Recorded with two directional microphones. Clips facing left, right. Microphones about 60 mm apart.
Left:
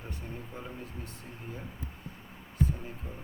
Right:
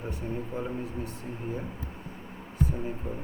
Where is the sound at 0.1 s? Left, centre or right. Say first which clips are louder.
Right 9 dB; centre.